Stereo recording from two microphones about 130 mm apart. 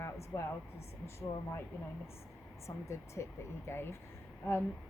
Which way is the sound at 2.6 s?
20° left (ahead or behind).